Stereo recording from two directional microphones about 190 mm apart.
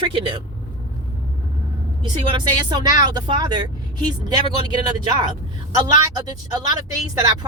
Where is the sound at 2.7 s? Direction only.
20° right (ahead or behind).